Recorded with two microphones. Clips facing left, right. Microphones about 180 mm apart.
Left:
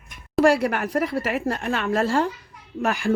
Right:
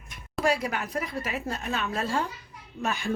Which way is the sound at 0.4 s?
75° left (ahead or behind).